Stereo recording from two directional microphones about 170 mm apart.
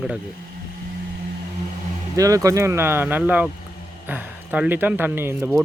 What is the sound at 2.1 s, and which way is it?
Speech, 20° right (ahead or behind).